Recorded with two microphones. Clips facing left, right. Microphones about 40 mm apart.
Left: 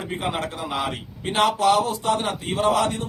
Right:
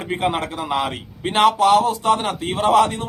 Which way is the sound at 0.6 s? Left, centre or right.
Right.